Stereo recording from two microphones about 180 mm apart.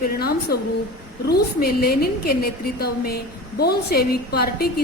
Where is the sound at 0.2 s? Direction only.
60° left (ahead or behind).